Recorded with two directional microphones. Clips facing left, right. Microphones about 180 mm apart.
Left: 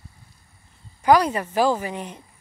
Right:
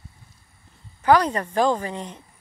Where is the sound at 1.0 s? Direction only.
10° left (ahead or behind).